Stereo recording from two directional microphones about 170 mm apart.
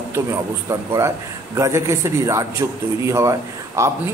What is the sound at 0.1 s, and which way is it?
A man's voice, 15° right (ahead or behind).